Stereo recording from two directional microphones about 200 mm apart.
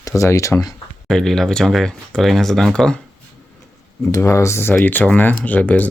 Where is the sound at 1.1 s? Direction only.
Centre (ahead or behind).